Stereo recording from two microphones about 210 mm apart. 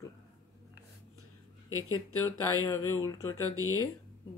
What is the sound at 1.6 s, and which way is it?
Speech, 90° left.